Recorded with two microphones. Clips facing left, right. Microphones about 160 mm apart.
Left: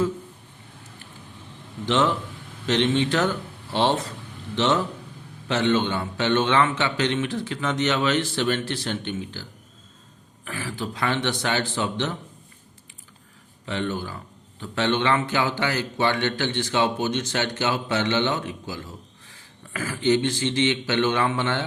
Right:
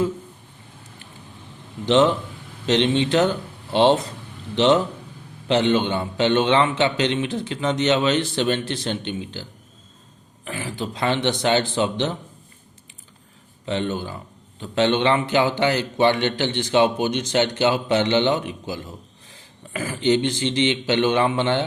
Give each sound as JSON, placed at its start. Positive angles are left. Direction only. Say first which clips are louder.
{"t": 1.9, "sound": "a man's voice", "louder": "right 5 dB", "side_deg": -20}
{"t": 13.7, "sound": "a man's voice", "louder": "right 3 dB", "side_deg": -20}